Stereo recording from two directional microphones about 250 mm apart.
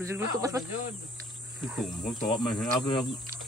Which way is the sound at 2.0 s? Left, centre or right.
Left.